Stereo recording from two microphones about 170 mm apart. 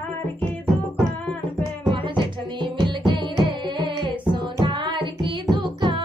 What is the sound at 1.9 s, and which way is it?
Music, 25° right (ahead or behind).